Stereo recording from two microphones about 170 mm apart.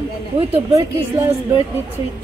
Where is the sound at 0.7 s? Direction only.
20° right (ahead or behind).